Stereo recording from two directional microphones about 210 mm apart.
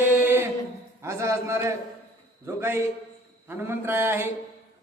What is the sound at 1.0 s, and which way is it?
A man's voice, 15° right (ahead or behind).